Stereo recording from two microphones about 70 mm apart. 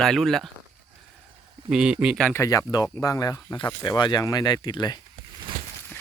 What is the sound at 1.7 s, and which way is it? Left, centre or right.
Speech, centre.